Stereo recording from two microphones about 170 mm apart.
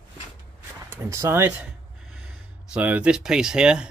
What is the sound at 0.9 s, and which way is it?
Speech, 15° right (ahead or behind).